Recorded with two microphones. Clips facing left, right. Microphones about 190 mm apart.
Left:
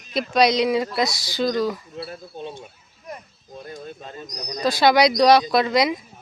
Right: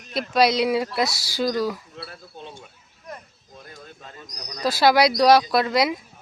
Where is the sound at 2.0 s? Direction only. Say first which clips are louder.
Left 6 dB; 20° left (ahead or behind).